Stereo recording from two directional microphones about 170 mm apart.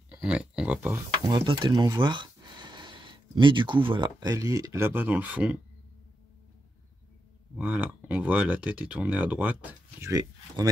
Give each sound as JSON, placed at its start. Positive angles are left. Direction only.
{"t": 0.1, "sound": "speech", "side_deg": -5}
{"t": 1.2, "sound": "speech", "side_deg": -25}
{"t": 7.5, "sound": "speech", "side_deg": -10}